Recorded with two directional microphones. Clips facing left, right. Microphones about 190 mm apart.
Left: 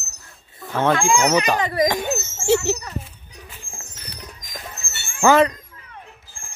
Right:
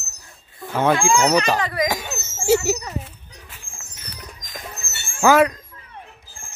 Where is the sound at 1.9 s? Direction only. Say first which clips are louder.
Left 4 dB; 10° right (ahead or behind).